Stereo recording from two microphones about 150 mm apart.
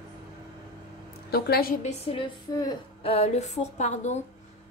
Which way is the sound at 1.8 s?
40° left (ahead or behind).